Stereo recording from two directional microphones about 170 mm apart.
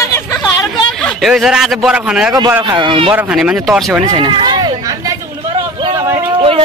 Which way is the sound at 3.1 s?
10° right (ahead or behind).